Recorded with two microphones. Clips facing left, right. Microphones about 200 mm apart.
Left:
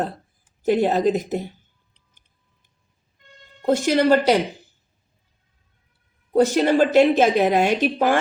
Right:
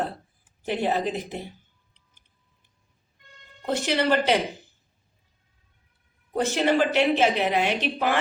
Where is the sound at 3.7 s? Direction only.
45° left (ahead or behind).